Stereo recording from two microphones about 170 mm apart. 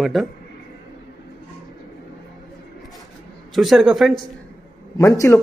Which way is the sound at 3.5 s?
Centre (ahead or behind).